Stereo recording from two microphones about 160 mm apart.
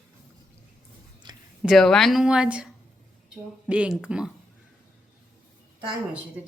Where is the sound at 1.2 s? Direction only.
25° right (ahead or behind).